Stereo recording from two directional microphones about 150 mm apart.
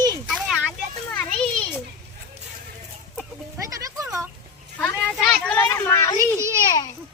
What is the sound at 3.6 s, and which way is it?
Music, 20° right (ahead or behind).